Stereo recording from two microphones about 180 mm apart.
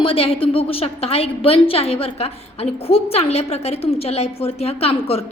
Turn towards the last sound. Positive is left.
turn(degrees=35)  # may be behind; listen again after turning